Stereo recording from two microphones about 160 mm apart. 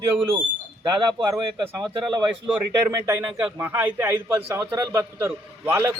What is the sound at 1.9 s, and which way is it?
Speech, 30° right (ahead or behind).